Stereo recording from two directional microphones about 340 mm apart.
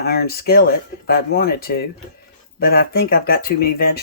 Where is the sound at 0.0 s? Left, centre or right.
Left.